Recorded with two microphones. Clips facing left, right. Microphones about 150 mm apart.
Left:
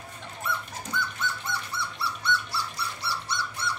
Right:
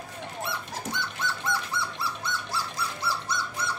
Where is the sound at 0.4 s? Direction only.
80° right.